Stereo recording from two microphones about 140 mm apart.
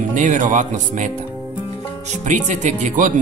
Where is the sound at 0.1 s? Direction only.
65° right (ahead or behind).